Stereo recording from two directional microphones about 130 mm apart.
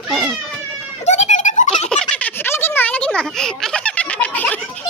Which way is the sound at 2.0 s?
10° left (ahead or behind).